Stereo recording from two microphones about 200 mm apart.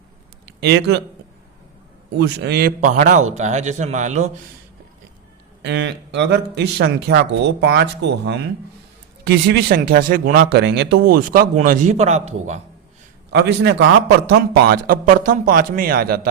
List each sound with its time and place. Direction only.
0.6 s speech: 55° right (ahead or behind)
2.1 s a man's voice: 55° right (ahead or behind); by 4.3 s 35° right (ahead or behind)
5.6 s a man's voice: 60° right (ahead or behind); by 12.6 s 35° right (ahead or behind)
13.3 s speech: 60° right (ahead or behind)
14.3 s a man's voice: 50° right (ahead or behind)